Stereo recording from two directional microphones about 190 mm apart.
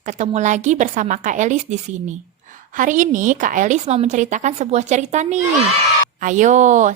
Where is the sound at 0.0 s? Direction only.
40° right (ahead or behind).